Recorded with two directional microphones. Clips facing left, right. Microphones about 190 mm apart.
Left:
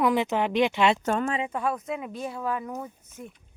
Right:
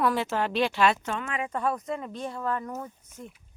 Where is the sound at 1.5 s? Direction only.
5° left (ahead or behind).